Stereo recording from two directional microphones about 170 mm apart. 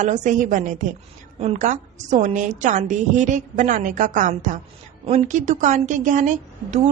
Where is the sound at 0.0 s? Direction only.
45° right (ahead or behind).